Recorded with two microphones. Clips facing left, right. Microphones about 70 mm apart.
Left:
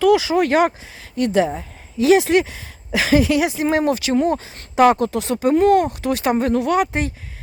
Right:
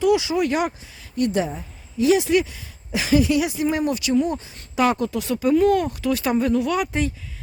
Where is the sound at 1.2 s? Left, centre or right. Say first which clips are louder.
Left 5 dB; left.